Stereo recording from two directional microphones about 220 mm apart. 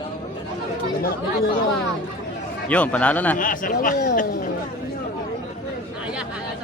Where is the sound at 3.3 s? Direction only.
40° left (ahead or behind).